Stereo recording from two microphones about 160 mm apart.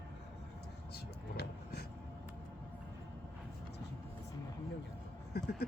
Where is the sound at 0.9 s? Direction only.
80° left.